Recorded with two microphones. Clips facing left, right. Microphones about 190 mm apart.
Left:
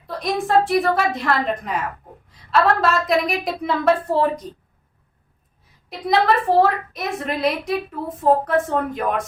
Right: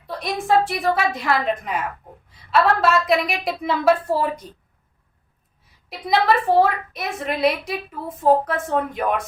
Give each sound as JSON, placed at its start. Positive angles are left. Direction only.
{"t": 0.2, "sound": "a woman's voice", "side_deg": 0}
{"t": 5.9, "sound": "a woman's voice", "side_deg": 0}